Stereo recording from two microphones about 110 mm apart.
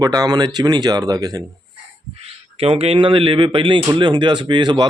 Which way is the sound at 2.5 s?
60° right (ahead or behind).